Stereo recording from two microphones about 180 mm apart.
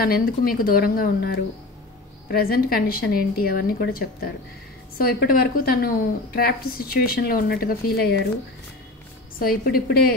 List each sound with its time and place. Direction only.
0.0 s a woman's voice: 55° left (ahead or behind)
9.4 s a woman's voice: 55° left (ahead or behind)